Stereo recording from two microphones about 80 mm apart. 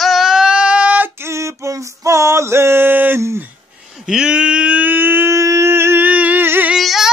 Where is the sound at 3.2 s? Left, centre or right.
Right.